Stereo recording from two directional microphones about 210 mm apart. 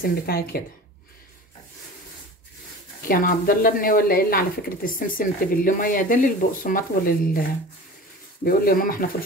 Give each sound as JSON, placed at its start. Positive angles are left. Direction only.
{"t": 0.0, "sound": "speech", "side_deg": 45}
{"t": 3.1, "sound": "speech", "side_deg": 45}
{"t": 8.5, "sound": "speech", "side_deg": 45}